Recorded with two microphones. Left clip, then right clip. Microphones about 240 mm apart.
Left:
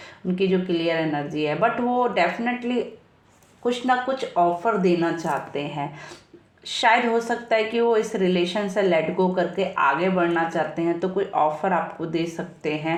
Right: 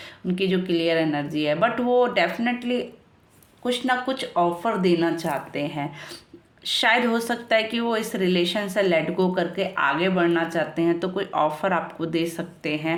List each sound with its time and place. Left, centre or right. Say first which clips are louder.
0.4 s a woman's voice: even; right